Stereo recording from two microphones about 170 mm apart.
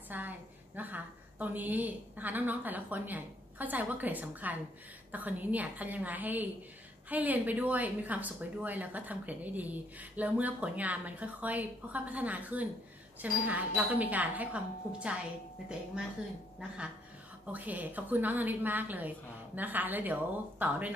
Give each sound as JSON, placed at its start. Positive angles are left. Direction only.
{"t": 0.1, "sound": "a woman's voice", "side_deg": -10}
{"t": 16.5, "sound": "a woman's voice", "side_deg": -5}